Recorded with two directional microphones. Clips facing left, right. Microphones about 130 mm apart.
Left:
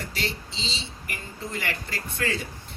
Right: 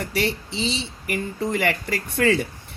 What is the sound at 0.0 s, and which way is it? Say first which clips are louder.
Speech: right 8 dB; 60° right (ahead or behind).